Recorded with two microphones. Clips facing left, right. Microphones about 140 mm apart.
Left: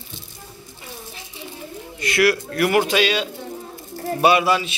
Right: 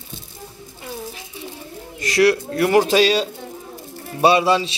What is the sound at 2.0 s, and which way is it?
A man's voice, 30° right (ahead or behind).